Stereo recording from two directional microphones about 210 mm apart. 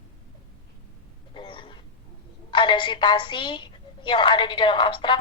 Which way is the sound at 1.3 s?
25° left (ahead or behind).